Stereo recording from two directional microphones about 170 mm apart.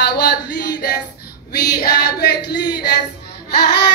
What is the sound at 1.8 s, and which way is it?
Female singing, 65° left (ahead or behind).